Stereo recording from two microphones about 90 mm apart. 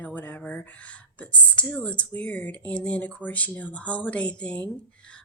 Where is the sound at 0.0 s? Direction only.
20° left (ahead or behind).